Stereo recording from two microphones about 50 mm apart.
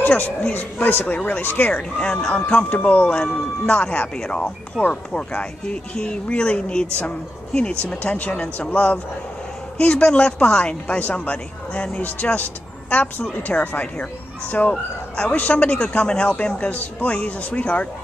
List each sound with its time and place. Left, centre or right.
0.0 s speech: left
1.6 s speech: left
2.7 s speech: left
12.0 s speech: left